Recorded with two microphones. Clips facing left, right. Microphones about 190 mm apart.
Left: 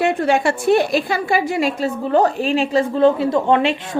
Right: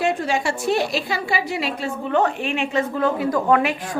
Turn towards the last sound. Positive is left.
turn(degrees=25)  # may be behind; listen again after turning